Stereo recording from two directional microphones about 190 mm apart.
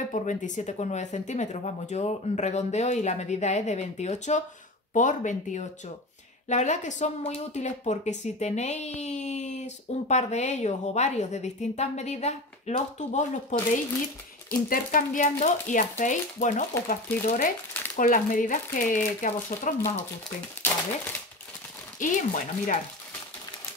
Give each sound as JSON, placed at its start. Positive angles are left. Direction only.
{"t": 0.1, "sound": "speech", "side_deg": 40}
{"t": 14.7, "sound": "speech", "side_deg": 45}
{"t": 22.0, "sound": "speech", "side_deg": 40}